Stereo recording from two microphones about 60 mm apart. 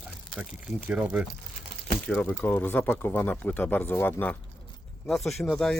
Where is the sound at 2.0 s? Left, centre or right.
Centre.